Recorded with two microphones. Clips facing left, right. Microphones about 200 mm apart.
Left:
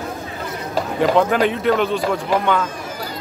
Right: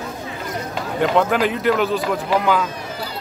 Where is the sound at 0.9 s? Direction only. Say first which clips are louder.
Left 1 dB; centre (ahead or behind).